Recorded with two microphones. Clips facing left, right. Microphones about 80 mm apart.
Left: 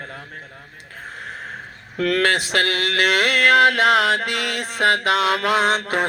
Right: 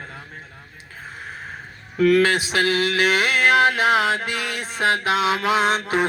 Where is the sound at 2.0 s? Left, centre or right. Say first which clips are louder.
Right 3 dB; left.